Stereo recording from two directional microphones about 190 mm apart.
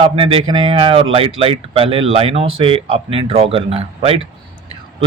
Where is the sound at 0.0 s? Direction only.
30° right (ahead or behind).